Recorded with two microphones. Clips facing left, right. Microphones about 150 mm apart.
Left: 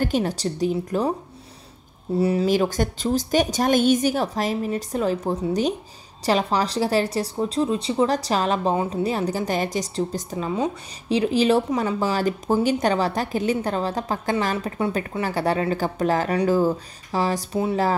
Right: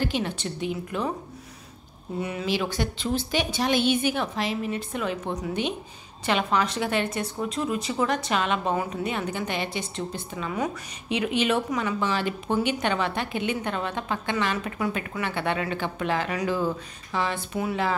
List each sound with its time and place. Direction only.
0.0 s a woman's voice: 40° left (ahead or behind)
2.1 s a woman's voice: 35° left (ahead or behind)